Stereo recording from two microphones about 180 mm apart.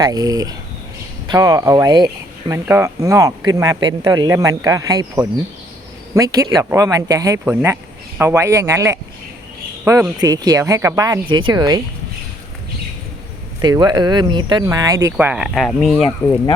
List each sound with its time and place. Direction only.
0.0 s speech: 20° right (ahead or behind)
13.6 s speech: 25° right (ahead or behind); by 16.0 s centre (ahead or behind)